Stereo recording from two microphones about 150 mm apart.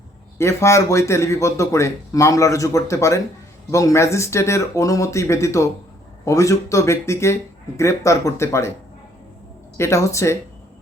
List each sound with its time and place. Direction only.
0.3 s speech: 20° left (ahead or behind)
9.7 s speech: 20° left (ahead or behind)